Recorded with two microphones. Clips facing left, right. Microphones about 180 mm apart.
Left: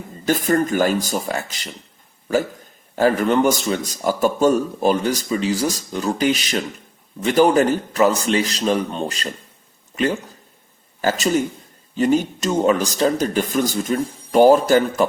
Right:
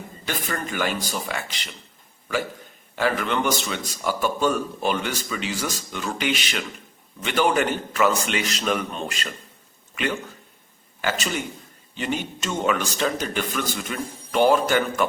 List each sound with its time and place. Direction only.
0.3 s speech: 45° left (ahead or behind)
2.9 s speech: 40° left (ahead or behind)